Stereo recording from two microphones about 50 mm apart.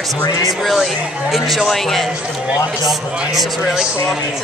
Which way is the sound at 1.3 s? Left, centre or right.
Centre.